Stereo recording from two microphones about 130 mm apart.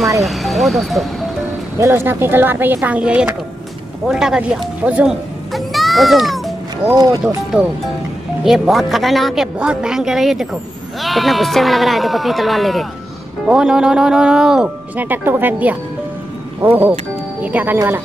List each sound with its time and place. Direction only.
0.2 s a woman's voice: centre (ahead or behind)
1.8 s a woman's voice: 20° right (ahead or behind)
5.5 s music: centre (ahead or behind)
8.5 s a woman's voice: centre (ahead or behind)